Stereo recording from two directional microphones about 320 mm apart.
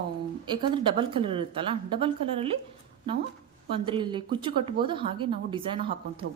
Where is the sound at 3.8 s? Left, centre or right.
Centre.